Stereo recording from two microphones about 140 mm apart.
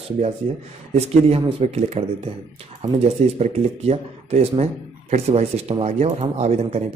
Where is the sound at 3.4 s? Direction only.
50° right (ahead or behind).